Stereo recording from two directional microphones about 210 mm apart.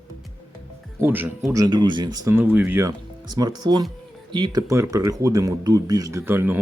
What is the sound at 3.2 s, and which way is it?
Speech, 20° right (ahead or behind).